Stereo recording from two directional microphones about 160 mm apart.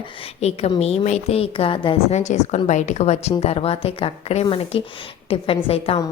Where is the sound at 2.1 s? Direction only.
45° left (ahead or behind).